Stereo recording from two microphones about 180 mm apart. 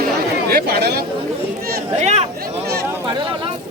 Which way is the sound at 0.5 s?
60° right (ahead or behind).